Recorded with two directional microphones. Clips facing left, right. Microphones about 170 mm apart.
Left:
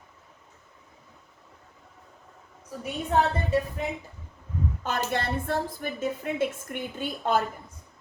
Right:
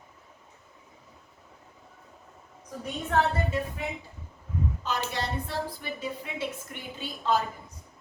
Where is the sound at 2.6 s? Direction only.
10° left (ahead or behind).